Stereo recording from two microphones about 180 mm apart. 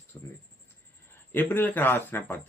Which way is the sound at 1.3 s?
10° left (ahead or behind).